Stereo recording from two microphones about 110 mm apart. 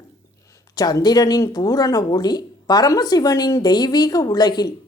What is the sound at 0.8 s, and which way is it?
A woman's voice, 35° left (ahead or behind).